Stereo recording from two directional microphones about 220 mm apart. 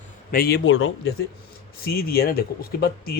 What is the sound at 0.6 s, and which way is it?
Speech, 60° left (ahead or behind).